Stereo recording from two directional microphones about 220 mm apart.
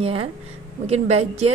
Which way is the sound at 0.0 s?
25° right (ahead or behind).